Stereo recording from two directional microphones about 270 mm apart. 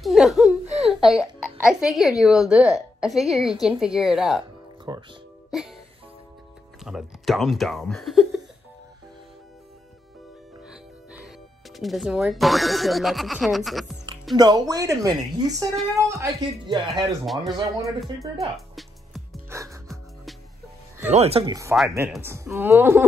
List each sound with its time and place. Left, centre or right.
0.0 s baby laughter: centre
1.6 s a woman's voice: centre
4.9 s speech: centre
5.5 s music: centre
6.8 s a woman's voice: centre
10.7 s speech: centre
14.3 s speech: centre
17.3 s a woman's voice: centre
18.8 s music: centre
19.5 s music: centre
21.1 s speech: right